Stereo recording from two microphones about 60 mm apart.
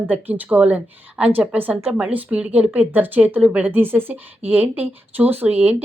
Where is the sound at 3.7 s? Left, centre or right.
Right.